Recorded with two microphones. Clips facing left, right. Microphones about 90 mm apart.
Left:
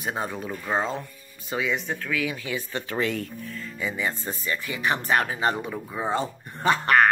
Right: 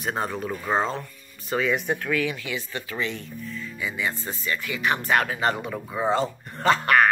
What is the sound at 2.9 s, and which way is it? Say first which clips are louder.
Speech: left 4 dB; 50° left (ahead or behind).